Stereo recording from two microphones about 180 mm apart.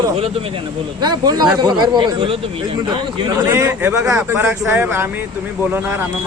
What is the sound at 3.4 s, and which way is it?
Speech, 15° right (ahead or behind).